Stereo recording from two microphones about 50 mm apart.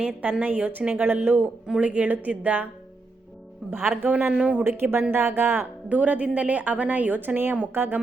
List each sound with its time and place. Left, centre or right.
0.0 s a woman's voice: right
1.0 s speech: right
1.8 s a woman's voice: right
3.6 s speech: centre
4.0 s a woman's voice: right
4.6 s speech: right
5.9 s a woman's voice: right